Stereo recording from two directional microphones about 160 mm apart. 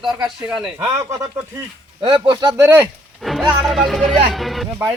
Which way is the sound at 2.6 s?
15° right (ahead or behind).